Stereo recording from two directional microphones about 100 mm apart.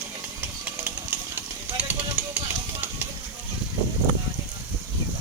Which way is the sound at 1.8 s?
15° right (ahead or behind).